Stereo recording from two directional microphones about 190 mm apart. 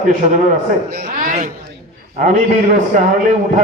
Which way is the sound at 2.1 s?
40° right (ahead or behind).